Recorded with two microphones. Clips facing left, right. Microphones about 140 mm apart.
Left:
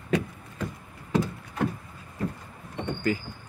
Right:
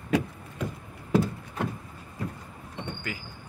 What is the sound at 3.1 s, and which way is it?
Speech, 35° left (ahead or behind).